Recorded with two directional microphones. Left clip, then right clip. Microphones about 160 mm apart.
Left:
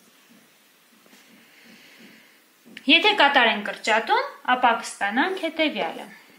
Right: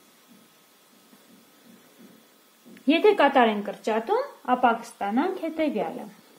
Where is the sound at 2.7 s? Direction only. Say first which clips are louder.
Left 2 dB; 60° right (ahead or behind).